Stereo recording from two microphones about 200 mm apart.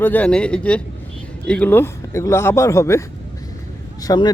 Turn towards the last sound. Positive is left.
turn(degrees=20)  # may be behind; listen again after turning